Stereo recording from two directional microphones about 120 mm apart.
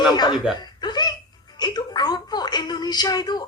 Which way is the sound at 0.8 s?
35° left (ahead or behind).